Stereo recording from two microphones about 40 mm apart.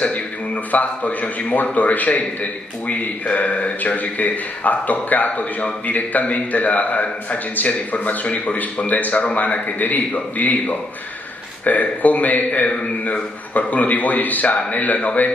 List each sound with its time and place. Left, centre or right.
0.7 s a man's voice: left
9.1 s a man's voice: left
9.4 s a man's voice: left